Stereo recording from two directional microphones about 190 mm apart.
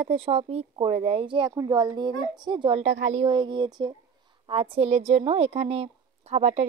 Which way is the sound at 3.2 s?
25° right (ahead or behind).